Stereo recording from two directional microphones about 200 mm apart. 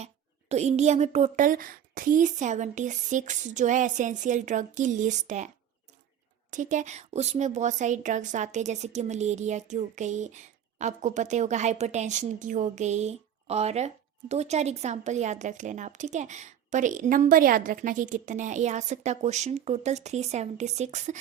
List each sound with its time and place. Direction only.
0.0 s speech: 35° right (ahead or behind)
6.5 s speech: 40° right (ahead or behind)